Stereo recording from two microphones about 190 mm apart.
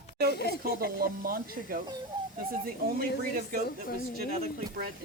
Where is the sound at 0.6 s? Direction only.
50° right (ahead or behind).